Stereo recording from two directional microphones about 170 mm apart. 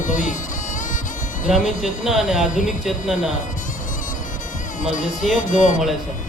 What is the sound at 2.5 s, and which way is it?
Speech, 50° left (ahead or behind).